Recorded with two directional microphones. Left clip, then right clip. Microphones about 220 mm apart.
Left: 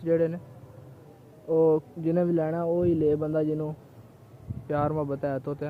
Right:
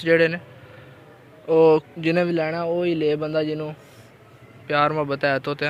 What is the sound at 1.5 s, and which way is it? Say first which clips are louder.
Speech: right 7 dB; 10° right (ahead or behind).